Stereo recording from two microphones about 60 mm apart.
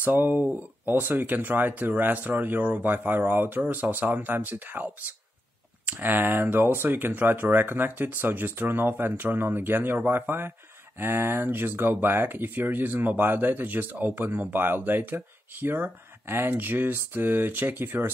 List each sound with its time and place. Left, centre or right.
0.0 s speech: right